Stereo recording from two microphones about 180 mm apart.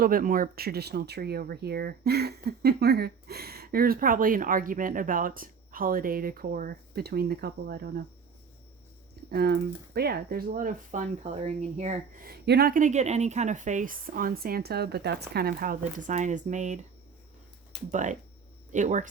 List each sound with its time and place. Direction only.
0.0 s speech: 50° right (ahead or behind)
9.3 s speech: 60° right (ahead or behind); by 11.9 s 40° right (ahead or behind)
12.2 s speech: 60° right (ahead or behind)
16.0 s speech: 45° right (ahead or behind)
17.9 s speech: 45° right (ahead or behind)